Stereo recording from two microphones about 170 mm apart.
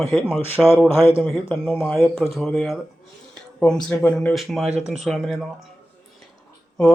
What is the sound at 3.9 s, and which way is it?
Speech, 5° left (ahead or behind).